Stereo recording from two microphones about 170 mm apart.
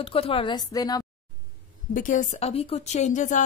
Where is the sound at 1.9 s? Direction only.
50° left (ahead or behind).